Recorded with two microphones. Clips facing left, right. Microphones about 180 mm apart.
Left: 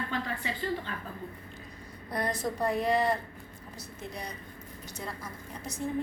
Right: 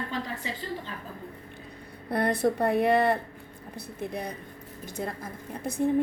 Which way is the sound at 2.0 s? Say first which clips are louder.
Right 7 dB; 60° right (ahead or behind).